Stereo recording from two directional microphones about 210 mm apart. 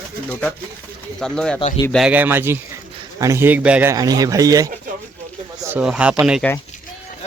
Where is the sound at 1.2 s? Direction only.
5° left (ahead or behind); by 4.7 s 15° right (ahead or behind).